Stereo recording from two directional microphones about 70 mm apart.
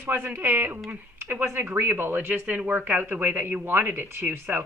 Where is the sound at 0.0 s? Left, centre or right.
Right.